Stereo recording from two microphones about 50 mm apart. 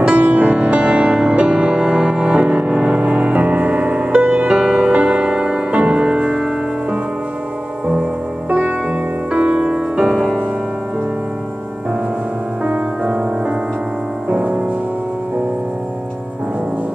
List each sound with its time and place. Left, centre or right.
0.0 s music: right
7.8 s music: right
9.9 s music: centre
12.6 s music: right